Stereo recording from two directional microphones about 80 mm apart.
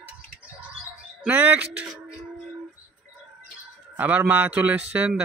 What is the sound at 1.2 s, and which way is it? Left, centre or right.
Speech, centre.